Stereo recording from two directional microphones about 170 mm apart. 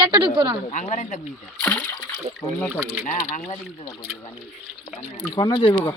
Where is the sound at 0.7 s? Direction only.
45° left (ahead or behind).